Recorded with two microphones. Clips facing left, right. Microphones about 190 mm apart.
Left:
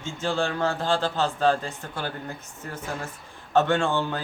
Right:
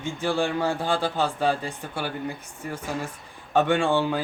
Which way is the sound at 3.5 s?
15° right (ahead or behind).